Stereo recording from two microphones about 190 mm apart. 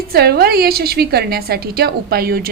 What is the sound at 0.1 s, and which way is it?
A woman's voice, 55° right (ahead or behind).